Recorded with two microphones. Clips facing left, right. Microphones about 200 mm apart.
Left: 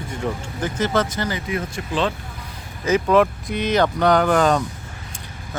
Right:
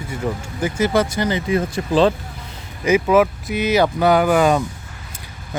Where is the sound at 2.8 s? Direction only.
10° right (ahead or behind).